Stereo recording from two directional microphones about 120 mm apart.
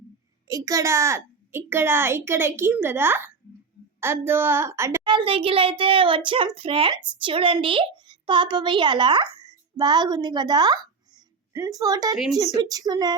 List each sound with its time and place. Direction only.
0.4 s a child's voice: 30° right (ahead or behind)
5.0 s a child's voice: 45° right (ahead or behind)